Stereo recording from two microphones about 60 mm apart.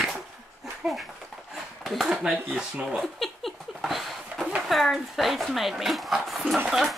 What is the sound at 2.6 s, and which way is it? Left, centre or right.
Speech, centre.